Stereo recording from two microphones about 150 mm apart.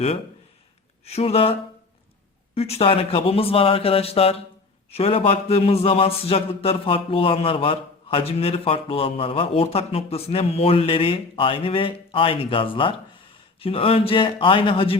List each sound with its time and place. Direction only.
1.0 s speech: 45° left (ahead or behind)
2.6 s a man's voice: 45° left (ahead or behind)